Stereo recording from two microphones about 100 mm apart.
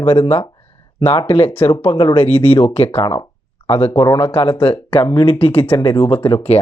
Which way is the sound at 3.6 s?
65° left (ahead or behind).